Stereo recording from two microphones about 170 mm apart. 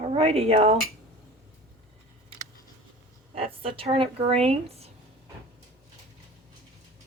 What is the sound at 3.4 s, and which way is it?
Speech, 35° right (ahead or behind).